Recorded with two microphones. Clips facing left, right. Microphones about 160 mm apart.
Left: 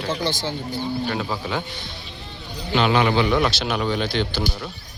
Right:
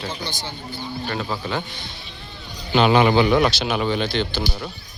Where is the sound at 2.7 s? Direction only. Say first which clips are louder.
Right 3 dB; 15° right (ahead or behind); by 4.4 s 5° left (ahead or behind).